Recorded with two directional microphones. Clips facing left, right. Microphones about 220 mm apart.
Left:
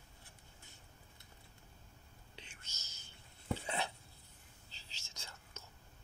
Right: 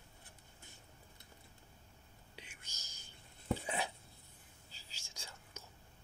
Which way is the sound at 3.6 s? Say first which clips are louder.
Even; 10° right (ahead or behind).